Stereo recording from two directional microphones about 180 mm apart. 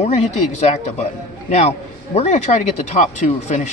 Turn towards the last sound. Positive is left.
turn(degrees=40)  # may be behind; listen again after turning